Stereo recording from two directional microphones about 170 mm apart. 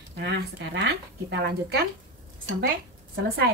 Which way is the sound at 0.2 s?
85° right.